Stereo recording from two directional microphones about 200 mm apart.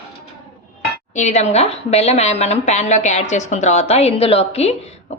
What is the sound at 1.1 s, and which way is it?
A woman's voice, 35° left (ahead or behind).